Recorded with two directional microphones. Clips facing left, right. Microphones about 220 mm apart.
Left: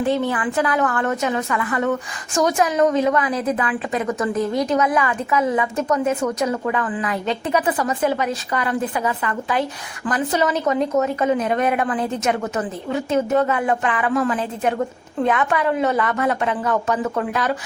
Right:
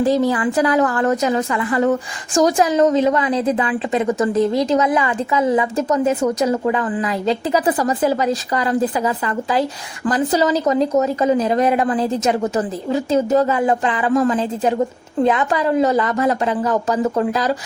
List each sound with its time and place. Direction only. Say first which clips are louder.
0.0 s a woman's voice: right 4 dB; 35° right (ahead or behind)